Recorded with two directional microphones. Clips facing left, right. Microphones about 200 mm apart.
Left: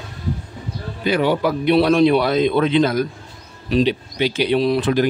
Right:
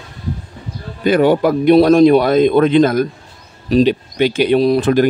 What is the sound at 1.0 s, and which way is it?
Speech, 50° right (ahead or behind).